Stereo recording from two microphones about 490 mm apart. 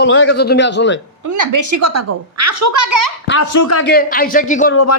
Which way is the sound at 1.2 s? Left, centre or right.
Right.